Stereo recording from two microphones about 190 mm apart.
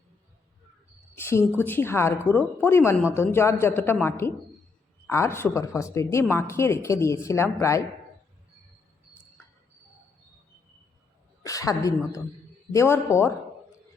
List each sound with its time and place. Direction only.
1.1 s a woman's voice: 15° left (ahead or behind)
11.4 s a woman's voice: 15° left (ahead or behind)